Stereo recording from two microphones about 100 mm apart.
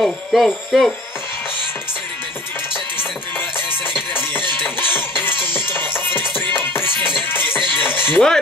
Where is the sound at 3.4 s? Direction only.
20° left (ahead or behind).